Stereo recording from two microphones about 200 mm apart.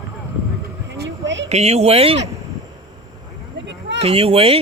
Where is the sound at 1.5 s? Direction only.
35° right (ahead or behind).